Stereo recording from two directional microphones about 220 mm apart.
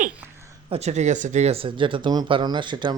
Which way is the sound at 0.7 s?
30° right (ahead or behind).